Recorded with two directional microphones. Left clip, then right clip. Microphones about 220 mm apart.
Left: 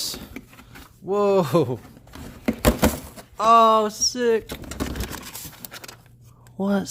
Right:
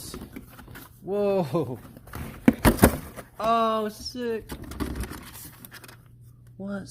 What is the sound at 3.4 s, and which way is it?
Speech, 20° left (ahead or behind).